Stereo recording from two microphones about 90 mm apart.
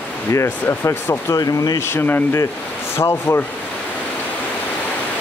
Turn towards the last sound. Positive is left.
turn(degrees=25)  # may be behind; listen again after turning